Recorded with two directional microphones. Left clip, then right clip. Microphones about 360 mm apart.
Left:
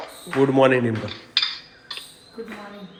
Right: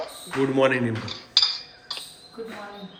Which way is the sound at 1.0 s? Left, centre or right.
Centre.